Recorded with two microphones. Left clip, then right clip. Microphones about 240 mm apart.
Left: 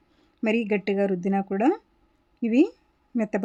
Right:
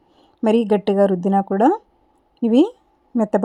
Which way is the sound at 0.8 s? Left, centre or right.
Centre.